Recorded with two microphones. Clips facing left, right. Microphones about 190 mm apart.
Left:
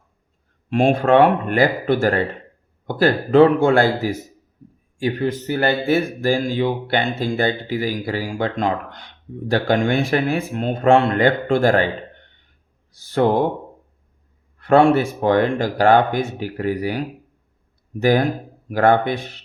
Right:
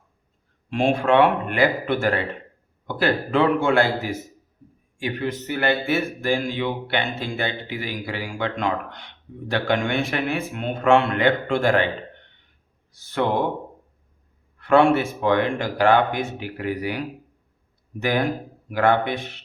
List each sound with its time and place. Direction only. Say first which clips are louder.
0.7 s speech: left 4 dB; 45° left (ahead or behind)
13.1 s speech: left 6 dB; 35° left (ahead or behind)
14.6 s speech: left 3 dB; 40° left (ahead or behind)